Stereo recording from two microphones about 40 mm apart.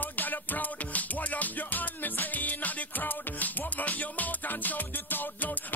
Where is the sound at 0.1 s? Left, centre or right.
Left.